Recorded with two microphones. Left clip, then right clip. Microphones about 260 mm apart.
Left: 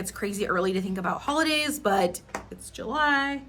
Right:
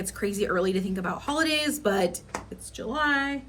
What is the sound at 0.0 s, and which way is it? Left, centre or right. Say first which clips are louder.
A woman's voice: right 2 dB; centre.